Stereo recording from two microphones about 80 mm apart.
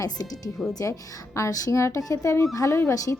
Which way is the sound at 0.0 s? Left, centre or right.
Left.